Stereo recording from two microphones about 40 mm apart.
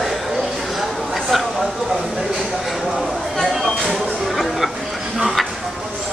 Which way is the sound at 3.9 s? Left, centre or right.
Centre.